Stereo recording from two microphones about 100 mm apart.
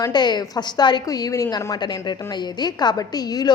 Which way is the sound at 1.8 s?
45° left (ahead or behind).